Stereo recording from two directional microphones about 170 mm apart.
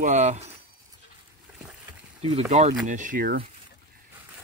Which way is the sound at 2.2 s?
40° right (ahead or behind).